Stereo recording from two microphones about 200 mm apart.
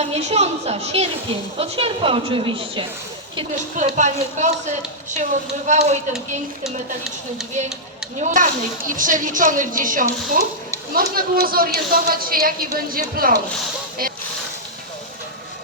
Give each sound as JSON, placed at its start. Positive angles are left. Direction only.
{"t": 0.0, "sound": "a woman's voice", "side_deg": -35}
{"t": 3.8, "sound": "a woman's voice", "side_deg": -35}
{"t": 5.6, "sound": "a woman's voice", "side_deg": -35}
{"t": 8.2, "sound": "a woman's voice", "side_deg": -40}
{"t": 14.0, "sound": "a sound", "side_deg": -45}